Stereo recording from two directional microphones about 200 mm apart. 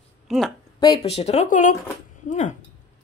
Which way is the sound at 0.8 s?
25° left (ahead or behind).